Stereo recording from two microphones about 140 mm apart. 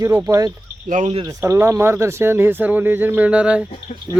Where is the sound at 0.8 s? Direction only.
65° right (ahead or behind).